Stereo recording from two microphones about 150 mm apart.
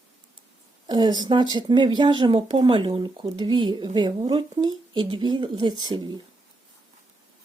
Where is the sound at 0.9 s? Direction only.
30° right (ahead or behind).